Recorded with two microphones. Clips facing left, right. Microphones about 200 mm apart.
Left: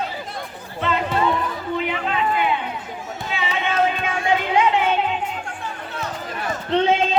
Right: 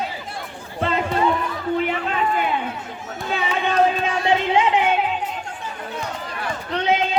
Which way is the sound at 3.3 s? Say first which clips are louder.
Right 2 dB; 40° right (ahead or behind).